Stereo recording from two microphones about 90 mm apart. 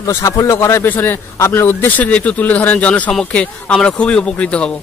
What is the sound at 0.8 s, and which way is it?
A man's voice, 20° left (ahead or behind).